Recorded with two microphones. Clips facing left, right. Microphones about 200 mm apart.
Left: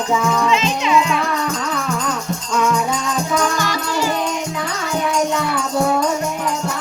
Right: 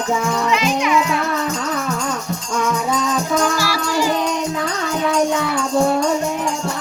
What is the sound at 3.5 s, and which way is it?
Music, 5° right (ahead or behind).